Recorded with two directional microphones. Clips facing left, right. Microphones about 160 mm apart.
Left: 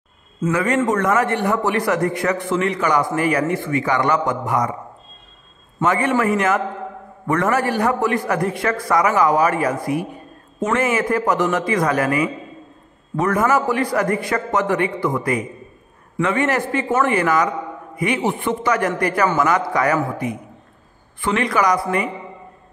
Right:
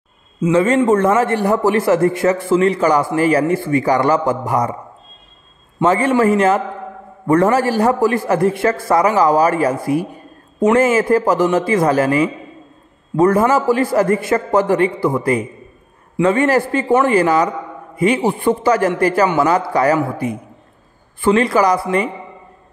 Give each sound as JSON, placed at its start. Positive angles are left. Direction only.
{"t": 0.5, "sound": "a man's voice", "side_deg": -25}
{"t": 5.9, "sound": "a man's voice", "side_deg": -30}